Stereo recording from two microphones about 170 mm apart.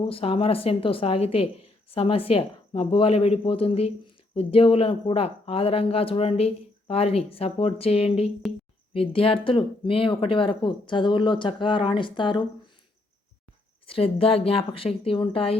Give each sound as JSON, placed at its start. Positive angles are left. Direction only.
{"t": 0.0, "sound": "speech", "side_deg": 35}
{"t": 13.8, "sound": "speech", "side_deg": 35}